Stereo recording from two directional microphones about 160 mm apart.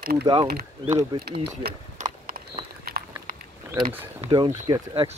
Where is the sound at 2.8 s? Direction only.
70° right (ahead or behind).